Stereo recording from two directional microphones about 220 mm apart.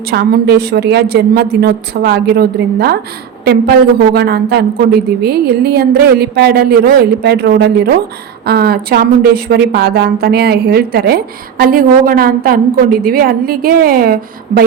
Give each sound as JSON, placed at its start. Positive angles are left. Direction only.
{"t": 0.1, "sound": "speech", "side_deg": -45}
{"t": 4.1, "sound": "speech", "side_deg": -45}